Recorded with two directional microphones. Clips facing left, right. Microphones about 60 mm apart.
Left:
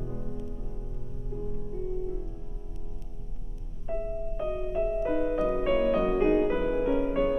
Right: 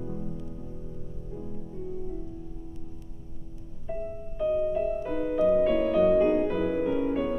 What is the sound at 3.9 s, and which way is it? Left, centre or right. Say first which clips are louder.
Music: left 2 dB; centre.